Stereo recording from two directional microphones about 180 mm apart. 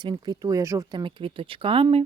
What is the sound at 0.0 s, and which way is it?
Speech, 25° right (ahead or behind).